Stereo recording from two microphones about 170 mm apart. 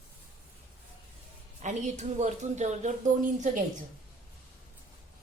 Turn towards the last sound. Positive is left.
turn(degrees=-45)  # may be behind; listen again after turning